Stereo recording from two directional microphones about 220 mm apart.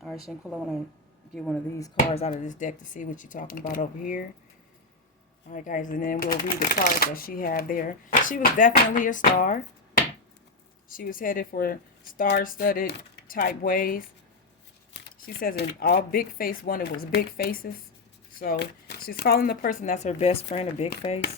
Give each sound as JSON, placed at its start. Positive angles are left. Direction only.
{"t": 0.0, "sound": "speech", "side_deg": 0}
{"t": 2.1, "sound": "speech", "side_deg": 30}
{"t": 5.5, "sound": "speech", "side_deg": 35}
{"t": 15.4, "sound": "speech", "side_deg": 40}